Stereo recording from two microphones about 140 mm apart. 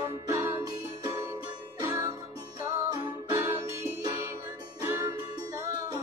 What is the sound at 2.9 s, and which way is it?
Music, 35° right (ahead or behind).